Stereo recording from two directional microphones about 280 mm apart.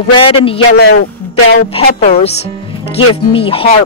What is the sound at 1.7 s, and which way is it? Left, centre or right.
A man's voice, left.